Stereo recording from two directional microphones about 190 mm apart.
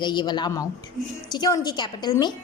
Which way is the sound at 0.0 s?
20° left (ahead or behind).